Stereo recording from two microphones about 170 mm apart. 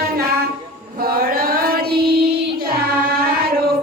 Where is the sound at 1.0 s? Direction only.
60° right (ahead or behind).